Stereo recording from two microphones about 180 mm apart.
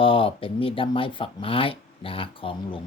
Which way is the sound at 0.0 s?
30° left (ahead or behind).